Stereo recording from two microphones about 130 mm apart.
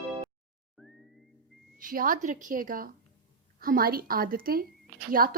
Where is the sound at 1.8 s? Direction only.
90° right.